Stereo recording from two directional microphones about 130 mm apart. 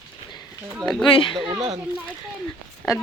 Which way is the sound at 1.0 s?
40° left (ahead or behind).